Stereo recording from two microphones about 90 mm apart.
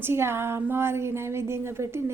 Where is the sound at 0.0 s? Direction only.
25° right (ahead or behind).